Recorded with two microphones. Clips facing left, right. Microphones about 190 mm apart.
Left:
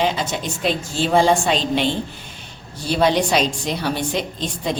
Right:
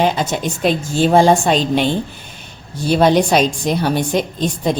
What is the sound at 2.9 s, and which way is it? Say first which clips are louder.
A woman's voice: right 5 dB; 50° right (ahead or behind).